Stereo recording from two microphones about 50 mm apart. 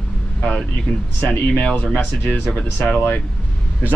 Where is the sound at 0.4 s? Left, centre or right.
Centre.